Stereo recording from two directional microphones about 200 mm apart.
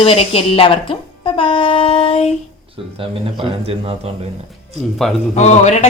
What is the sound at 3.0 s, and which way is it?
Speech, 25° right (ahead or behind).